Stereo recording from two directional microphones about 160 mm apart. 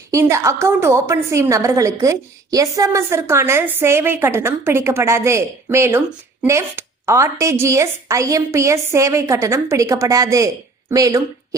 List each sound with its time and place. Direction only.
0.1 s a woman's voice: 20° right (ahead or behind)